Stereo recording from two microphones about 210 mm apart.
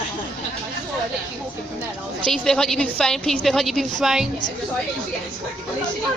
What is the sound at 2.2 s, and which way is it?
Speech, 5° left (ahead or behind).